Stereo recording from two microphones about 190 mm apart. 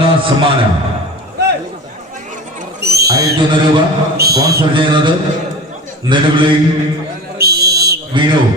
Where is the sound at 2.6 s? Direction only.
55° right (ahead or behind).